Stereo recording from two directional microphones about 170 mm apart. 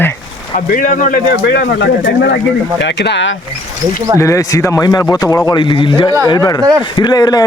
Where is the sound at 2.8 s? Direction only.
90° left.